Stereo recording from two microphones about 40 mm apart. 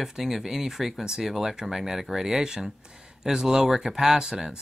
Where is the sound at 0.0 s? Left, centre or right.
Centre.